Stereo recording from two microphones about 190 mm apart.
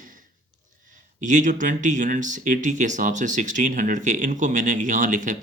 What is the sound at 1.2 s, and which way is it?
Speech, 40° right (ahead or behind).